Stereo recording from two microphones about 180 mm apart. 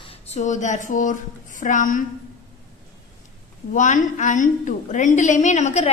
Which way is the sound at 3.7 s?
45° left (ahead or behind).